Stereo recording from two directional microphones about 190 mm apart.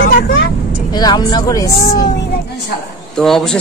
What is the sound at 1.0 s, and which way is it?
Speech, 20° left (ahead or behind).